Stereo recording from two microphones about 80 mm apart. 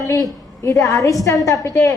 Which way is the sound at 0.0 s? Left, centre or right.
Left.